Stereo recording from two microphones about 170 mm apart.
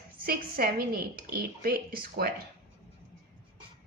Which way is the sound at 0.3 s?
60° right (ahead or behind).